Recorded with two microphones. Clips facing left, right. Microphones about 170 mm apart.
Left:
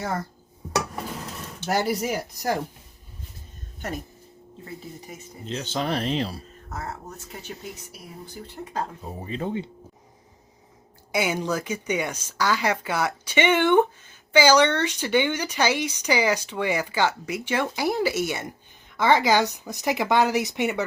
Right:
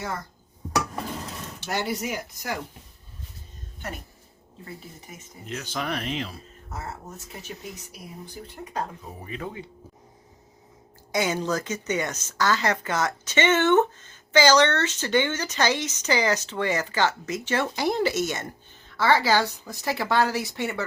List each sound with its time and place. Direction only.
1.7 s speech: 40° left (ahead or behind)
5.5 s speech: 30° left (ahead or behind)
9.2 s speech: 30° left (ahead or behind)
11.1 s speech: 10° left (ahead or behind)